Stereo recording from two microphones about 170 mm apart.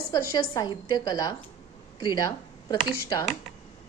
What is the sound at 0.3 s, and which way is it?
A woman's voice, 25° left (ahead or behind).